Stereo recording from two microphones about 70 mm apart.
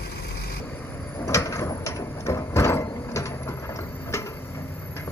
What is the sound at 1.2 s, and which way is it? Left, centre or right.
Sliding door, left.